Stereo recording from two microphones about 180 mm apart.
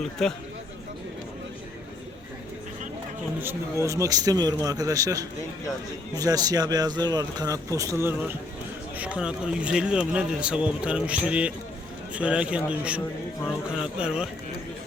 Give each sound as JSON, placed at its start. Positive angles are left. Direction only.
{"t": 0.2, "sound": "a man's voice", "side_deg": 0}
{"t": 3.8, "sound": "a man's voice", "side_deg": -20}